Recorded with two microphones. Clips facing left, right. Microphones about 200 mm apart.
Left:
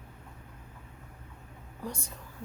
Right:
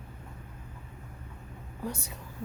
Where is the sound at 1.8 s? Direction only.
5° right (ahead or behind).